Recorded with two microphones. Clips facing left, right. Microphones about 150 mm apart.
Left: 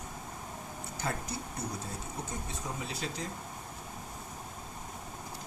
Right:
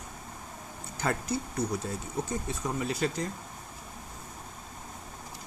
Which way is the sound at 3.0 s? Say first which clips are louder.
Right 9 dB; 60° right (ahead or behind).